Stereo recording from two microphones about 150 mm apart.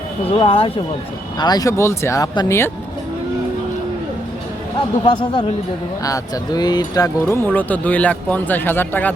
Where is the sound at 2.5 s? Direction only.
15° left (ahead or behind).